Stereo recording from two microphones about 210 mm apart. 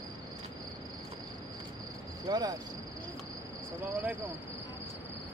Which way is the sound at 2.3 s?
20° right (ahead or behind).